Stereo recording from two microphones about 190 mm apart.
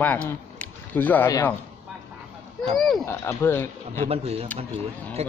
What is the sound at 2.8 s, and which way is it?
Speech, centre (ahead or behind).